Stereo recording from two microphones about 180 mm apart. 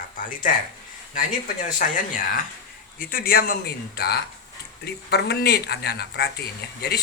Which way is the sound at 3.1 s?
60° left (ahead or behind).